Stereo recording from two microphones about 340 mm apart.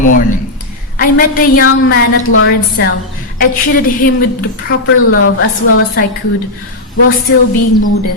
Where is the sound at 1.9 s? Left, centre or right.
Left.